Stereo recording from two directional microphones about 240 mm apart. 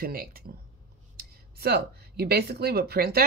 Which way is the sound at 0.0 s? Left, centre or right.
Right.